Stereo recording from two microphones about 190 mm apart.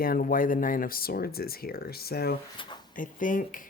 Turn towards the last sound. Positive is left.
turn(degrees=45)  # may be behind; listen again after turning